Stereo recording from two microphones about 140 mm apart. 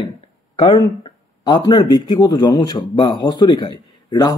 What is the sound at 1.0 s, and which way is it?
A man's voice, 30° left (ahead or behind).